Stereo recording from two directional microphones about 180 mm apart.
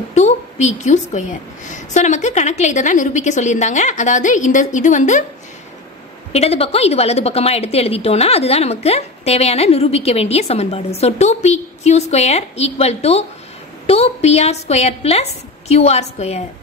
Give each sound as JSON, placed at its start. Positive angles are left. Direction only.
{"t": 0.1, "sound": "a woman's voice", "side_deg": 40}
{"t": 6.3, "sound": "a woman's voice", "side_deg": 35}